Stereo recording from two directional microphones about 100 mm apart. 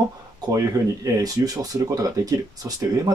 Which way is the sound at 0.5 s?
35° right (ahead or behind).